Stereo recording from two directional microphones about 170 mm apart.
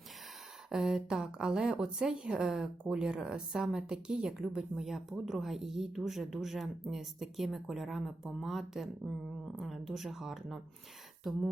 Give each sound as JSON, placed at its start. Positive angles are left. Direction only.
{"t": 0.7, "sound": "a woman's voice", "side_deg": 0}